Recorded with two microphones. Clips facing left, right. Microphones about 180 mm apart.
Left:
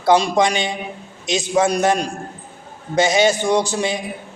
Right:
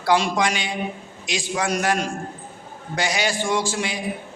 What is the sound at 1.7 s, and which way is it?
A man's voice, 30° left (ahead or behind).